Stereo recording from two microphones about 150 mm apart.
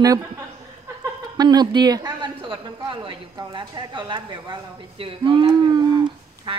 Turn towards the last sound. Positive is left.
turn(degrees=-30)  # may be behind; listen again after turning